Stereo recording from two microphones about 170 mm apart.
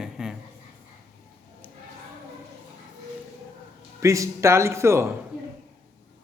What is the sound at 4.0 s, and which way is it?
A man's voice, 20° right (ahead or behind).